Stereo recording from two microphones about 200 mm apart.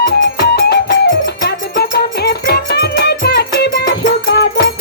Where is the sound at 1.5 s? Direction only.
55° left (ahead or behind).